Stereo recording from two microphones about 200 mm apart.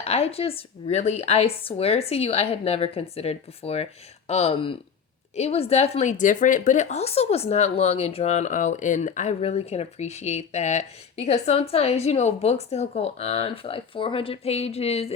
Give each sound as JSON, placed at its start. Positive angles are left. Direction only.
{"t": 0.0, "sound": "speech", "side_deg": 30}